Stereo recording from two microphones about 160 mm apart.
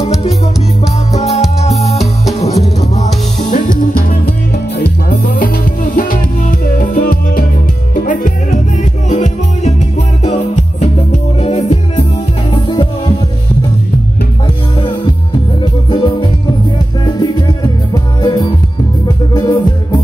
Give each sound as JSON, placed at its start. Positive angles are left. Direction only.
{"t": 1.1, "sound": "music", "side_deg": 40}
{"t": 4.7, "sound": "music", "side_deg": 75}
{"t": 9.1, "sound": "music", "side_deg": 45}
{"t": 15.9, "sound": "music", "side_deg": 25}
{"t": 17.9, "sound": "music", "side_deg": 25}